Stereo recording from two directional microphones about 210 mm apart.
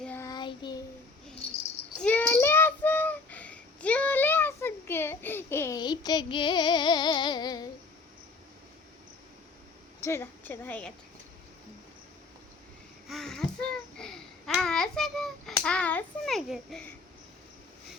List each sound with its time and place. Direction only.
0.0 s child singing: 10° left (ahead or behind)
2.0 s child singing: 5° left (ahead or behind)
10.0 s a woman's voice: 10° left (ahead or behind)
13.1 s babbling: centre (ahead or behind)